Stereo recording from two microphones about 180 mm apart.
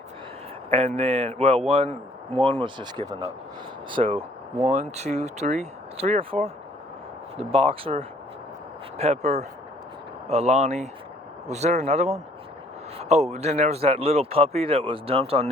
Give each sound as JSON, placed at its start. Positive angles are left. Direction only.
{"t": 0.7, "sound": "speech", "side_deg": -30}